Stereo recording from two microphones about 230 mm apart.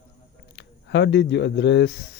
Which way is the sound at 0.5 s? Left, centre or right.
Left.